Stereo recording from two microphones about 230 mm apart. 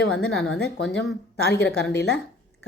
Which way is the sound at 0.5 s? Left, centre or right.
Left.